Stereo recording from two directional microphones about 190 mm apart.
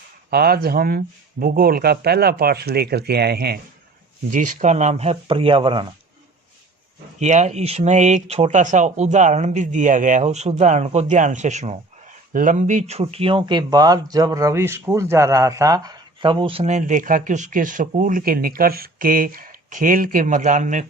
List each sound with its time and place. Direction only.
0.3 s speech: 55° right (ahead or behind)
4.3 s speech: 40° right (ahead or behind); by 5.9 s 25° right (ahead or behind)
7.2 s speech: 40° right (ahead or behind)